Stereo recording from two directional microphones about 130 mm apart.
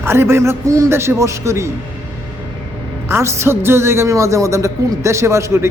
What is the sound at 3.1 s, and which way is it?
A woman's voice, 20° right (ahead or behind).